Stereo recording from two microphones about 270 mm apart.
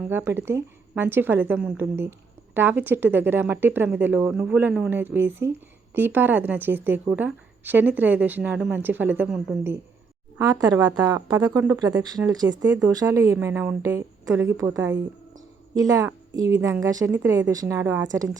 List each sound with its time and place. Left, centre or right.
0.0 s speech: centre